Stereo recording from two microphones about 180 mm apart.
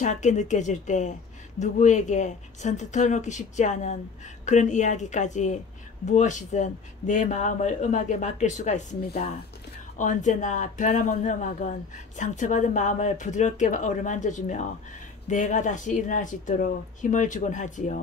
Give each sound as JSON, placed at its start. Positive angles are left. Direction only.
{"t": 0.0, "sound": "a man's voice", "side_deg": 40}